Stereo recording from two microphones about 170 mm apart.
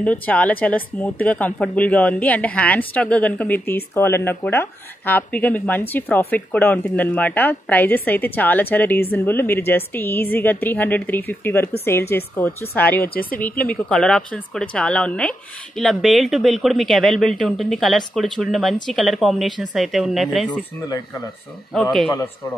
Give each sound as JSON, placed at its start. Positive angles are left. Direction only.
{"t": 0.0, "sound": "speech", "side_deg": 10}
{"t": 13.1, "sound": "speech", "side_deg": 60}
{"t": 13.4, "sound": "speech", "side_deg": 10}